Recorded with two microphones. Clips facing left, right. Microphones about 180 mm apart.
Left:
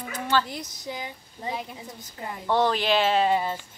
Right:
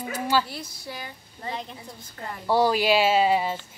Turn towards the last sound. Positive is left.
turn(degrees=-5)  # may be behind; listen again after turning